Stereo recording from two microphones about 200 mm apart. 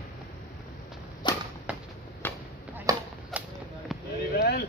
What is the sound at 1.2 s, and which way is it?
Whip, 20° left (ahead or behind).